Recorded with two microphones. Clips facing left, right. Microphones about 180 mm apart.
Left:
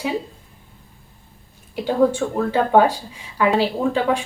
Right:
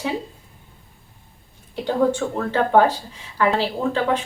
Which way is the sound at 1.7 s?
10° left (ahead or behind).